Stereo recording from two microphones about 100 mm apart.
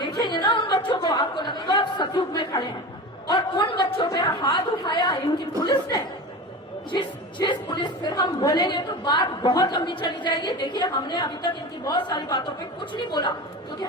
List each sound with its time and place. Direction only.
0.0 s a sound: 50° left (ahead or behind)
4.1 s chatter: 50° left (ahead or behind)
5.5 s chuckle: 40° left (ahead or behind)
6.9 s a woman's voice: 50° left (ahead or behind)